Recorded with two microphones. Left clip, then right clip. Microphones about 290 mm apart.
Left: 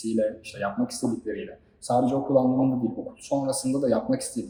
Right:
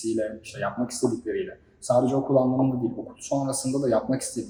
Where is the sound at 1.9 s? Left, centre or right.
Centre.